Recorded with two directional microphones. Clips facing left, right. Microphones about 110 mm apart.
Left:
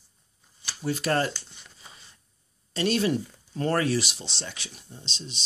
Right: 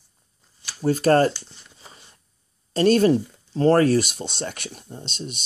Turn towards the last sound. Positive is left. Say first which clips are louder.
# right 7 dB
turn(degrees=-55)  # may be behind; listen again after turning